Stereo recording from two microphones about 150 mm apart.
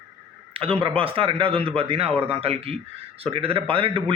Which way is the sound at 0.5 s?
35° right (ahead or behind).